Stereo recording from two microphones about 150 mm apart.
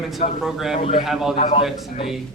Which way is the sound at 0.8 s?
35° left (ahead or behind).